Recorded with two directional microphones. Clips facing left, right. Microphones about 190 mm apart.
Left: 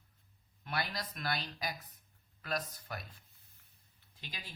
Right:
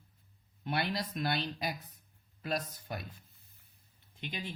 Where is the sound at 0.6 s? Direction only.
25° right (ahead or behind).